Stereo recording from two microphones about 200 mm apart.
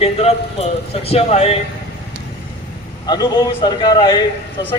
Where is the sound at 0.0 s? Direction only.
30° left (ahead or behind).